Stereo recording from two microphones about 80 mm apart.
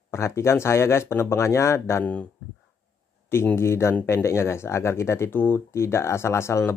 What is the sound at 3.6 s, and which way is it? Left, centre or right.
Speech, left.